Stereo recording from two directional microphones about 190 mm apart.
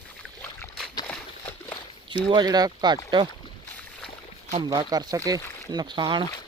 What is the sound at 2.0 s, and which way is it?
Speech, 25° right (ahead or behind).